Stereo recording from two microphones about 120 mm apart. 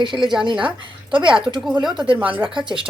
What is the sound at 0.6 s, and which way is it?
A woman's voice, 45° right (ahead or behind).